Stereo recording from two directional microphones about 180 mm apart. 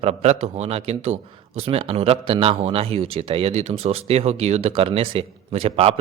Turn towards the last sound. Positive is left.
turn(degrees=-35)  # may be behind; listen again after turning